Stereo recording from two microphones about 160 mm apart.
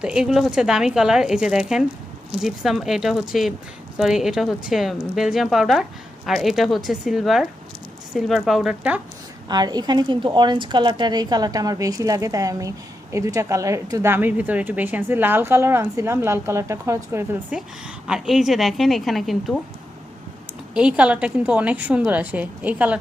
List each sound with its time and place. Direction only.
0.0 s speech: 5° right (ahead or behind)
9.5 s a woman's voice: 25° right (ahead or behind)
18.1 s speech: centre (ahead or behind)
20.7 s a woman's voice: 5° right (ahead or behind)